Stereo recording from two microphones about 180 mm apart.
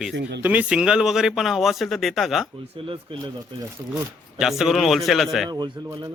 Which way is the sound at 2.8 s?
30° right (ahead or behind).